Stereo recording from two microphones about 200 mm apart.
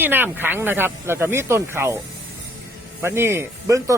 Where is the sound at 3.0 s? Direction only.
10° right (ahead or behind).